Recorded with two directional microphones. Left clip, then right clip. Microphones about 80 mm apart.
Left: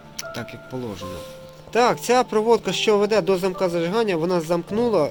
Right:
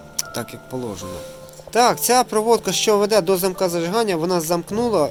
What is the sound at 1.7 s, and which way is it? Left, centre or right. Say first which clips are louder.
Speech: right 2 dB; right.